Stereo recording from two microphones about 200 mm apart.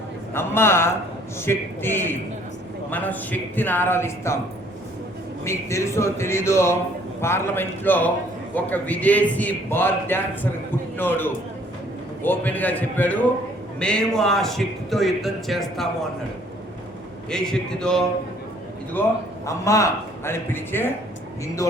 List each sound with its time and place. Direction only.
0.3 s a man's voice: 10° left (ahead or behind)
5.5 s a man's voice: 15° left (ahead or behind)
17.2 s speech: 5° left (ahead or behind)
19.5 s a man's voice: 15° left (ahead or behind)